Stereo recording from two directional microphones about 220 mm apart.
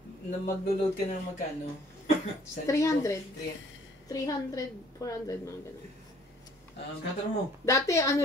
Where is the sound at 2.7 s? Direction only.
15° left (ahead or behind).